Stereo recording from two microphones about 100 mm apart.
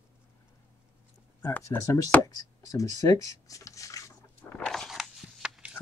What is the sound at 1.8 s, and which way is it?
Speech, 35° left (ahead or behind).